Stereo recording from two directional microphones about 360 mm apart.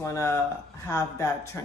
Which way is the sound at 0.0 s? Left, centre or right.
Centre.